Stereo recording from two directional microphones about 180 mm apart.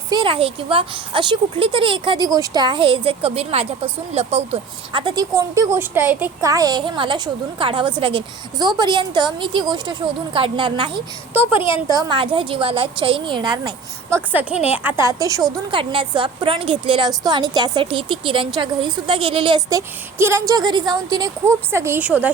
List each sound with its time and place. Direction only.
0.1 s a woman's voice: 30° right (ahead or behind)
14.3 s a woman's voice: 5° right (ahead or behind)